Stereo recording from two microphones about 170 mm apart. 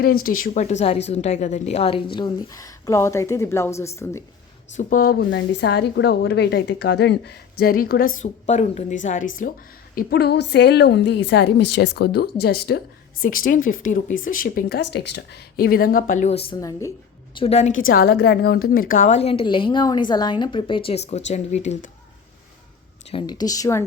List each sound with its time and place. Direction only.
0.0 s a woman's voice: 60° left (ahead or behind); by 4.2 s 15° left (ahead or behind)
4.8 s a woman's voice: 55° left (ahead or behind)
9.9 s a woman's voice: 60° left (ahead or behind); by 16.6 s 35° left (ahead or behind)
16.6 s speech: 20° left (ahead or behind)
17.3 s a woman's voice: 35° left (ahead or behind)
23.2 s speech: 25° left (ahead or behind)